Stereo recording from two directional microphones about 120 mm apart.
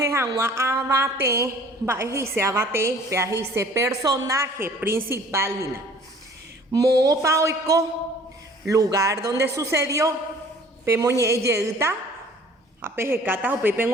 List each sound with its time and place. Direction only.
0.0 s a woman's voice: 25° right (ahead or behind)
6.7 s a woman's voice: 30° right (ahead or behind)